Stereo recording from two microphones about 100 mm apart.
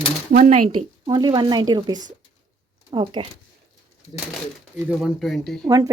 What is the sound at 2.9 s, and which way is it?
Speech, 60° right (ahead or behind).